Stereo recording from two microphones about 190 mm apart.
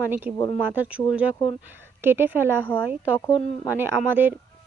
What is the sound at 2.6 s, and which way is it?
Speech, 10° left (ahead or behind).